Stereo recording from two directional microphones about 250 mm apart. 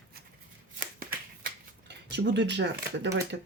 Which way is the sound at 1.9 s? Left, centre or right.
Right.